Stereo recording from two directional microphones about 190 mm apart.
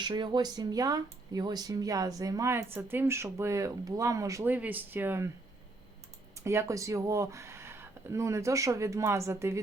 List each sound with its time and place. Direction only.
0.0 s speech: 25° right (ahead or behind)
6.4 s speech: 15° right (ahead or behind)